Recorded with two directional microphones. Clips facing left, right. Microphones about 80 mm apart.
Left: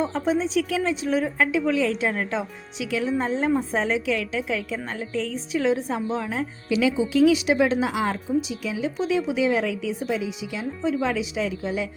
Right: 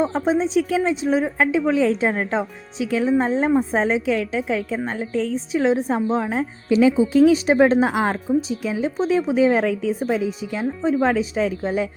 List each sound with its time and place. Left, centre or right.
0.0 s a woman's voice: right